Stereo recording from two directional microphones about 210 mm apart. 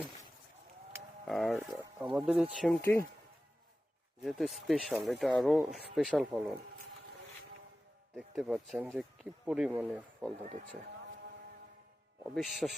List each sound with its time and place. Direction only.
1.2 s speech: centre (ahead or behind)
4.2 s speech: centre (ahead or behind)
8.1 s speech: centre (ahead or behind)
10.4 s speech: 40° right (ahead or behind)
12.2 s speech: centre (ahead or behind)